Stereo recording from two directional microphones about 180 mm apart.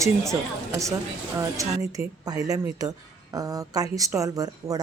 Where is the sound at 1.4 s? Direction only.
15° right (ahead or behind).